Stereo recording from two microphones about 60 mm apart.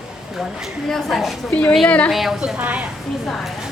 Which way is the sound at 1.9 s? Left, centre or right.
Left.